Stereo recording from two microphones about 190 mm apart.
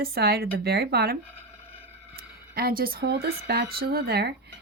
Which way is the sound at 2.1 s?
50° right (ahead or behind).